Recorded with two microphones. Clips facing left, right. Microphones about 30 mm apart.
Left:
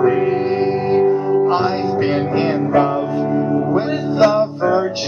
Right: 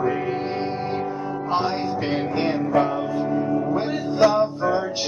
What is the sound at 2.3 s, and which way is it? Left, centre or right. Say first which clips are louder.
Speech: left 4 dB; left.